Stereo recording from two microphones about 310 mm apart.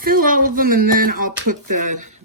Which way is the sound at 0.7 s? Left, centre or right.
Right.